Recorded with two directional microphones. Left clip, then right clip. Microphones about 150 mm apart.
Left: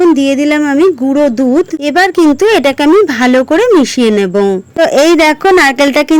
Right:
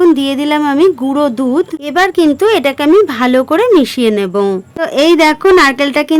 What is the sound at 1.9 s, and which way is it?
A woman's voice, 25° left (ahead or behind).